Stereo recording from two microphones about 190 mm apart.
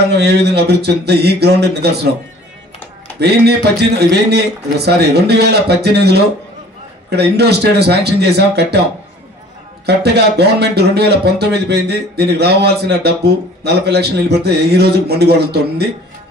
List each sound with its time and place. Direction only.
0.1 s speech: 60° right (ahead or behind)
3.2 s speech: 60° right (ahead or behind)
9.8 s speech: 60° right (ahead or behind)